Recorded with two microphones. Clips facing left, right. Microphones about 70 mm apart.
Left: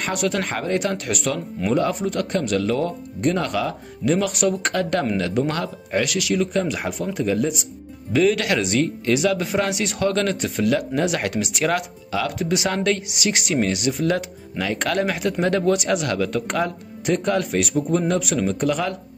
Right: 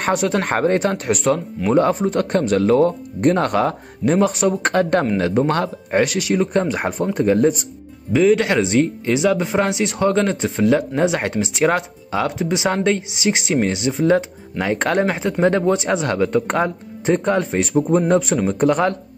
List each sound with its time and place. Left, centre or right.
0.0 s speech: right
8.1 s speech: centre; by 18.9 s right